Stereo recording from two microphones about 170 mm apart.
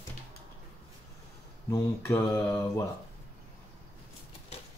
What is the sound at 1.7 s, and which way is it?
Mantra, 15° left (ahead or behind).